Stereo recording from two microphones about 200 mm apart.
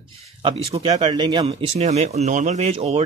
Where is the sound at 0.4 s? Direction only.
25° right (ahead or behind).